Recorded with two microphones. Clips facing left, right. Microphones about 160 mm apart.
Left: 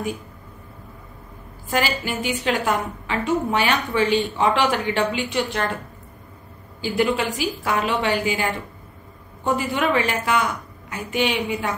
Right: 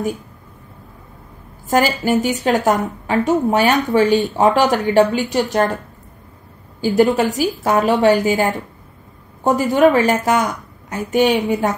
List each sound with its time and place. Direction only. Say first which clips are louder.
1.7 s a woman's voice: right 8 dB; 45° right (ahead or behind)
6.8 s a woman's voice: right 7 dB; 40° right (ahead or behind)